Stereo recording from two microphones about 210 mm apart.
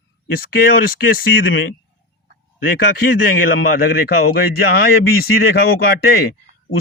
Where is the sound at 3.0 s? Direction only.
45° left (ahead or behind).